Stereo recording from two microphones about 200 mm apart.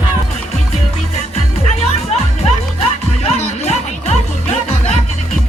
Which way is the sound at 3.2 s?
35° left (ahead or behind).